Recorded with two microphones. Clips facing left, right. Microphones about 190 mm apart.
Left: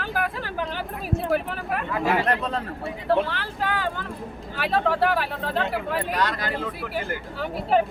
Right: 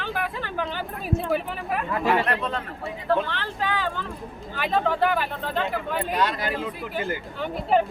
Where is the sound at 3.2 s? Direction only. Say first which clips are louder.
Even; 5° left (ahead or behind).